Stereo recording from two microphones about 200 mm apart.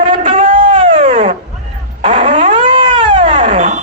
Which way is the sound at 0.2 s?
40° right (ahead or behind).